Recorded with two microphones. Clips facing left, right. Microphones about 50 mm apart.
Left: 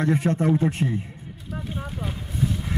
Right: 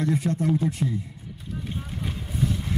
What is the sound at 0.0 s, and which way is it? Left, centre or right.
Speech, left.